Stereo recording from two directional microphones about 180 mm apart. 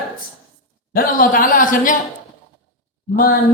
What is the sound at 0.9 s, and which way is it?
Speech, 50° left (ahead or behind).